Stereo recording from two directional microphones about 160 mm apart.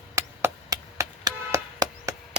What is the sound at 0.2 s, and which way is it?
Chop, 20° right (ahead or behind).